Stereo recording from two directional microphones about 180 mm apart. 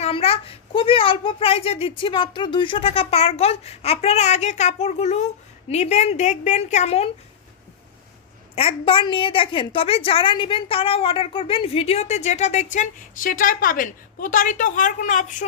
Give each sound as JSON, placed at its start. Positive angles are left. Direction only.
{"t": 0.0, "sound": "a woman's voice", "side_deg": 35}
{"t": 8.5, "sound": "a woman's voice", "side_deg": 30}